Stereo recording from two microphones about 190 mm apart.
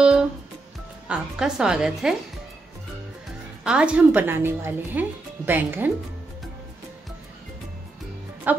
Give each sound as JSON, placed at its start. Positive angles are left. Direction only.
{"t": 0.0, "sound": "music", "side_deg": -5}
{"t": 1.0, "sound": "a woman's voice", "side_deg": -5}
{"t": 3.6, "sound": "speech", "side_deg": -5}
{"t": 8.5, "sound": "speech", "side_deg": -10}